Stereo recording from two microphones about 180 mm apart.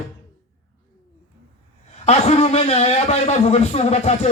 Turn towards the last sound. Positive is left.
turn(degrees=35)  # may be behind; listen again after turning